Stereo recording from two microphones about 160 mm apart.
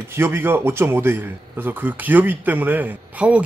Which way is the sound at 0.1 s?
15° right (ahead or behind).